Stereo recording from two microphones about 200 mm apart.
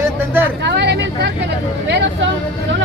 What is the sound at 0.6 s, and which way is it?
Speech, 55° right (ahead or behind).